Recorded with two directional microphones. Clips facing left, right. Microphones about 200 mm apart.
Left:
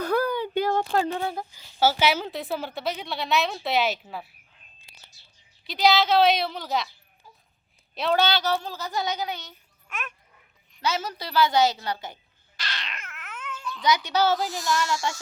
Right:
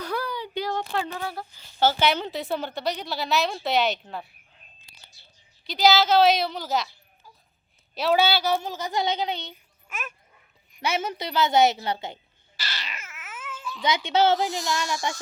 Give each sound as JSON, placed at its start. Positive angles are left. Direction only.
{"t": 0.0, "sound": "a sound", "side_deg": 50}
{"t": 1.0, "sound": "speech", "side_deg": 30}
{"t": 1.3, "sound": "a woman's voice", "side_deg": 15}
{"t": 5.6, "sound": "a woman's voice", "side_deg": 0}
{"t": 7.9, "sound": "speech", "side_deg": -5}
{"t": 9.9, "sound": "speech", "side_deg": -5}
{"t": 10.8, "sound": "speech", "side_deg": -25}
{"t": 12.5, "sound": "babbling", "side_deg": -5}
{"t": 13.8, "sound": "speech", "side_deg": -25}